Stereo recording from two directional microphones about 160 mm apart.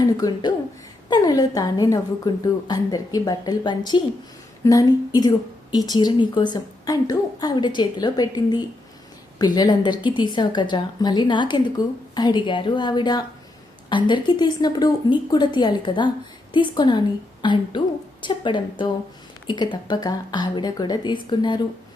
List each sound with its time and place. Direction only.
0.0 s a woman's voice: 25° left (ahead or behind)